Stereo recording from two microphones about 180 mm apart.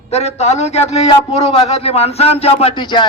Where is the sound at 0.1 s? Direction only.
35° left (ahead or behind).